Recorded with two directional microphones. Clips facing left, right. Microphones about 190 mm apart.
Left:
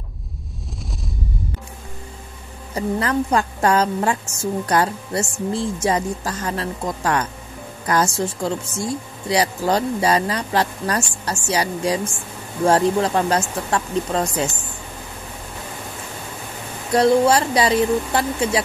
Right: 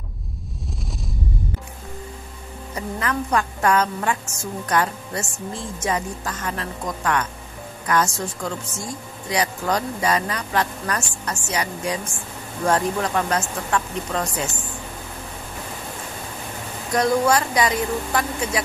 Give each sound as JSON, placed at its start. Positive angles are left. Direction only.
{"t": 2.7, "sound": "speech", "side_deg": 30}
{"t": 16.9, "sound": "speech", "side_deg": 30}